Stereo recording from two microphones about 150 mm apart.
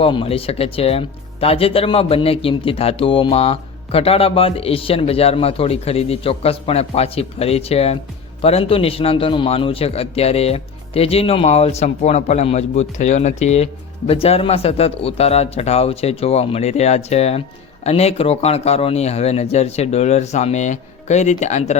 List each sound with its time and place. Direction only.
0.0 s a man's voice: 35° left (ahead or behind)